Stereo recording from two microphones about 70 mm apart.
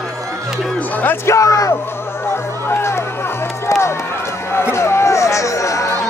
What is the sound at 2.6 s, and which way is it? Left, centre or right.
Run, left.